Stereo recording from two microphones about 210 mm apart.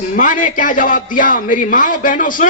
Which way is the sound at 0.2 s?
40° left (ahead or behind).